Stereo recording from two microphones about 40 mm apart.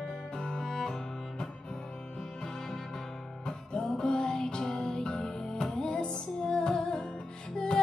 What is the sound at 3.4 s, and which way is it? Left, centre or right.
Music, left.